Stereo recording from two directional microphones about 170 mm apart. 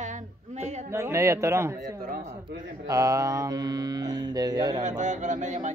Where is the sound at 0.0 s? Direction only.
45° right (ahead or behind).